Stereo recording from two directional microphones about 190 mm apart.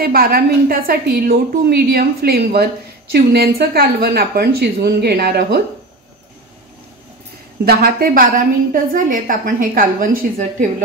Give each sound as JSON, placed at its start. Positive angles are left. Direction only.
{"t": 0.0, "sound": "a woman's voice", "side_deg": -50}
{"t": 7.6, "sound": "a woman's voice", "side_deg": -55}